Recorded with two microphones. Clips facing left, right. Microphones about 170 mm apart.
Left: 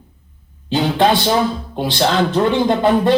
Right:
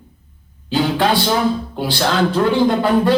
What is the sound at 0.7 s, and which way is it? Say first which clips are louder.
A man's voice: left 1 dB; 20° left (ahead or behind).